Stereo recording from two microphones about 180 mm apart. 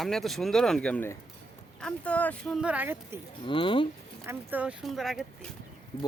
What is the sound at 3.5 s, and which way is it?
Speech, 30° left (ahead or behind).